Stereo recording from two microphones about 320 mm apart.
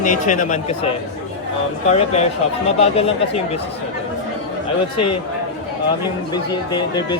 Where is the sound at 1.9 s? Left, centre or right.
Centre.